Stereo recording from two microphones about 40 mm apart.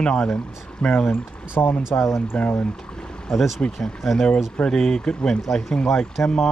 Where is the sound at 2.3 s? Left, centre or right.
Left.